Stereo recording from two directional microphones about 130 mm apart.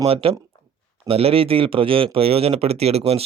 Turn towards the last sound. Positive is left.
turn(degrees=-50)  # may be behind; listen again after turning